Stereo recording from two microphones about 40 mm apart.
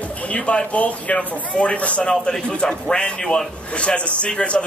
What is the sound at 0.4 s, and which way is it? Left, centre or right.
A man's voice, left.